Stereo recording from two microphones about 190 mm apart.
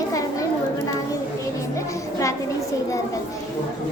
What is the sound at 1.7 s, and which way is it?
Music, 15° left (ahead or behind).